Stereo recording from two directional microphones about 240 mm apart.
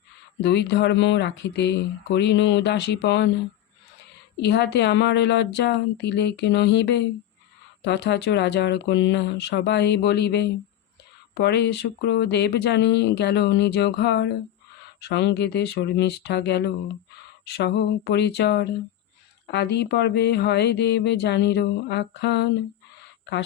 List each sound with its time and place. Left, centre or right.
0.4 s speech: left
4.4 s speech: left